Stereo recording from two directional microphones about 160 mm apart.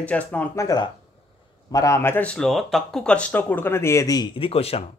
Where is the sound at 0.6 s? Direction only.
25° left (ahead or behind).